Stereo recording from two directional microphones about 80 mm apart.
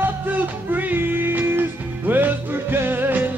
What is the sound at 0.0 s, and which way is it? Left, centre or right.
Music, right.